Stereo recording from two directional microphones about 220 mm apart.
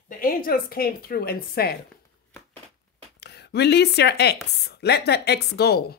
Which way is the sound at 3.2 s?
50° left (ahead or behind).